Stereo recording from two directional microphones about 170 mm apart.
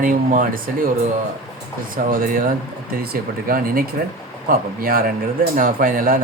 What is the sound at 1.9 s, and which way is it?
Speech, 55° right (ahead or behind).